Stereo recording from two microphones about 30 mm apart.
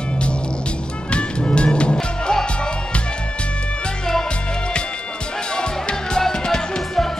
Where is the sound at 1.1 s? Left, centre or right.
Left.